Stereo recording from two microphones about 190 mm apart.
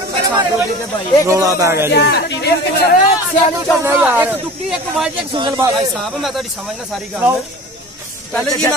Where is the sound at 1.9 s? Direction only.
65° left (ahead or behind).